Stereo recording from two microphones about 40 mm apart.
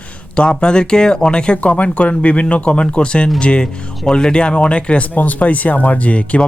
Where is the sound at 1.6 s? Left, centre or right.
Left.